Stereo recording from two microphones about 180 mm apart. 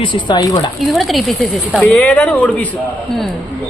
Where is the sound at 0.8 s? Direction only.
Centre (ahead or behind).